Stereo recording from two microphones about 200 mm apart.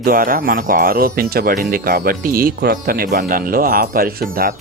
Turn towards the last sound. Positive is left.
turn(degrees=-45)  # may be behind; listen again after turning